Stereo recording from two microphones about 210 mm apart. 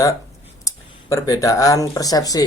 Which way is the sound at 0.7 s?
15° left (ahead or behind).